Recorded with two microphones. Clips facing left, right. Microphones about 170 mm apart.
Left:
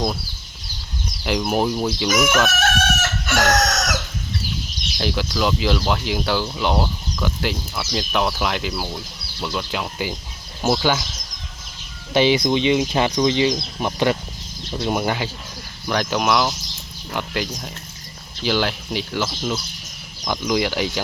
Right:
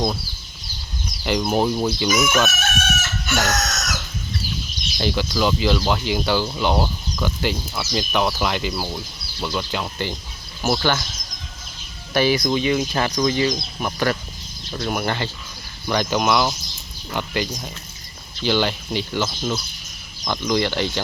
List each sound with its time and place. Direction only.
1.2 s speech: centre (ahead or behind)
2.5 s chicken: 90° left
4.9 s speech: centre (ahead or behind)
12.1 s speech: 20° left (ahead or behind)
15.9 s speech: centre (ahead or behind)